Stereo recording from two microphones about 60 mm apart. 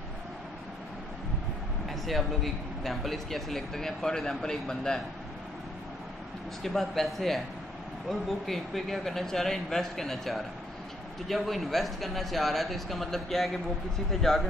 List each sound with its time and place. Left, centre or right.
1.9 s speech: centre
6.6 s speech: centre